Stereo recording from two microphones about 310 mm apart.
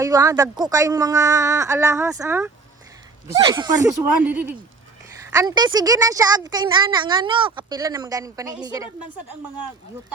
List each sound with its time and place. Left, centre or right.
0.0 s a woman's voice: centre